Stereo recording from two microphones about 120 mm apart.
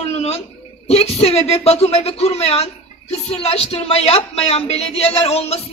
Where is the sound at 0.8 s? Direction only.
55° left (ahead or behind).